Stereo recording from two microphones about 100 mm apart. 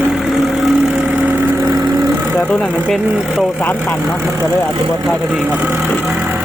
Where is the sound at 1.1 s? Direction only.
15° right (ahead or behind).